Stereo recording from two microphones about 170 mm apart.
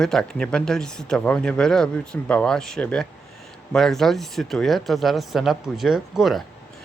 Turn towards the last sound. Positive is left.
turn(degrees=0)  # may be behind; listen again after turning